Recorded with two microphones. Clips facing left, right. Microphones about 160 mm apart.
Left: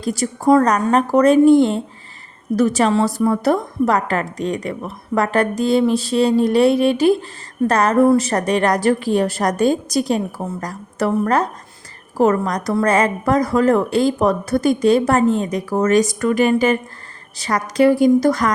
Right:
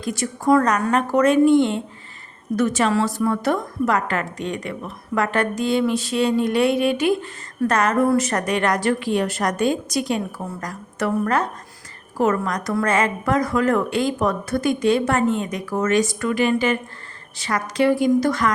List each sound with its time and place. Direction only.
0.0 s a woman's voice: 35° left (ahead or behind)